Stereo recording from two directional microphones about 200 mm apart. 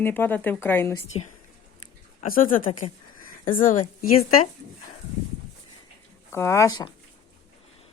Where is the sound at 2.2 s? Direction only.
45° left (ahead or behind).